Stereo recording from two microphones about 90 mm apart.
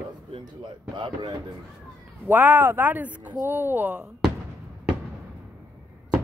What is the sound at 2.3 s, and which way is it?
Speech, 20° right (ahead or behind).